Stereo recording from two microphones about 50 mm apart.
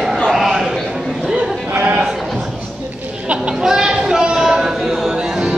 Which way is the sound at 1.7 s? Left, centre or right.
Right.